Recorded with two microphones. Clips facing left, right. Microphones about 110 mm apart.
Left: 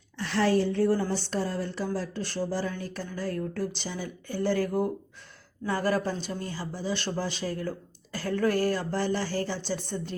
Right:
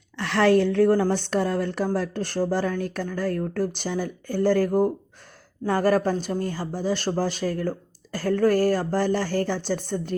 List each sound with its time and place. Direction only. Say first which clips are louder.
0.2 s a woman's voice: right 6 dB; 75° right (ahead or behind); by 10.2 s 50° right (ahead or behind)